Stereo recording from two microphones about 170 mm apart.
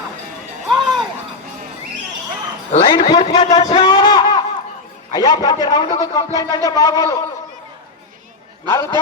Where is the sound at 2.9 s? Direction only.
30° left (ahead or behind).